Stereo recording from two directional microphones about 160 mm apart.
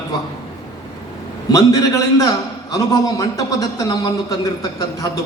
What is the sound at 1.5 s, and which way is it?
A man's voice, 20° left (ahead or behind).